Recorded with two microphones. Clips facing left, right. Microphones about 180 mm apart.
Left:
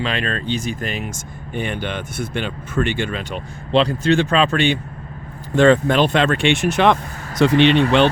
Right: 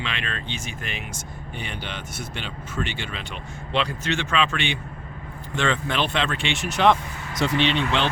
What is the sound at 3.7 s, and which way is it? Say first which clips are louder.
Speech: left 10 dB; 35° left (ahead or behind).